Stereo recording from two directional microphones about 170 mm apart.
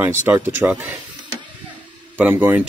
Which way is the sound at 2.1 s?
10° right (ahead or behind).